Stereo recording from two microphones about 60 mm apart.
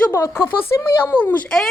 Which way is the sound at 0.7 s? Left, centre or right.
Left.